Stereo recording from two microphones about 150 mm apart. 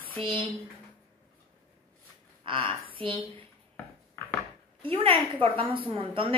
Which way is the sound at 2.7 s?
35° right (ahead or behind).